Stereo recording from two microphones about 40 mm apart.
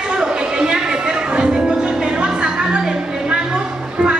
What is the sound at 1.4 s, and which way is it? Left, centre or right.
Music, right.